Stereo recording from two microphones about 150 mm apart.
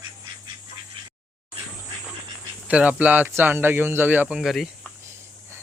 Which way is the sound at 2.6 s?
10° right (ahead or behind).